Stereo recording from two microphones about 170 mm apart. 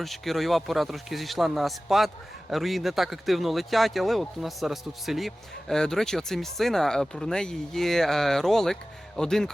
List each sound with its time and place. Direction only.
0.0 s speech: centre (ahead or behind)